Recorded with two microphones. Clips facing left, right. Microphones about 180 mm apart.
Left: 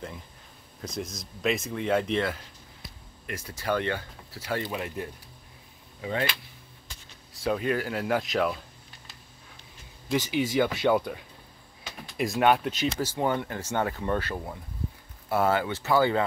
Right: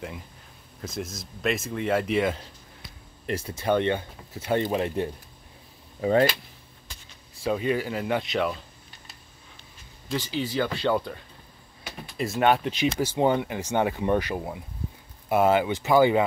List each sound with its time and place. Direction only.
0.7 s speech: centre (ahead or behind)
3.3 s speech: 30° right (ahead or behind)
5.9 s speech: 40° right (ahead or behind)
7.4 s speech: centre (ahead or behind)
10.0 s speech: 15° left (ahead or behind); by 12.9 s centre (ahead or behind)
13.0 s speech: 20° right (ahead or behind)